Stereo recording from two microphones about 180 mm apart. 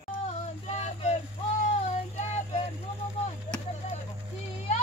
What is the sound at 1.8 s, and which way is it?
Child singing, 40° left (ahead or behind).